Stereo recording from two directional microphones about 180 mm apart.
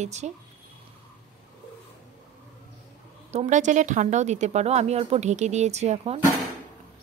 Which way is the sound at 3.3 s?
40° right (ahead or behind).